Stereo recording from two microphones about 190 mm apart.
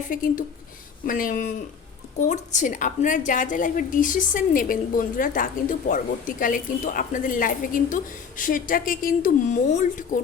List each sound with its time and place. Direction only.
0.1 s a woman's voice: 45° left (ahead or behind)